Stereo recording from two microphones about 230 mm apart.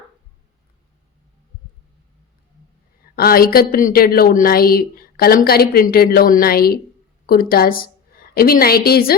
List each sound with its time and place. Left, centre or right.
3.2 s a woman's voice: left